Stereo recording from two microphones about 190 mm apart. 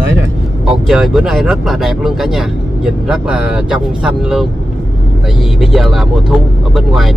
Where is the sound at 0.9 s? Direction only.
Centre (ahead or behind).